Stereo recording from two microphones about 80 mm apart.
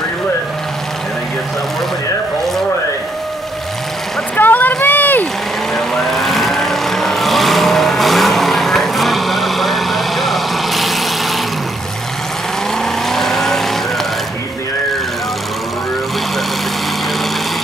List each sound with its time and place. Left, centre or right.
4.4 s vehicle: left
5.8 s vehicle: centre
13.1 s vehicle: centre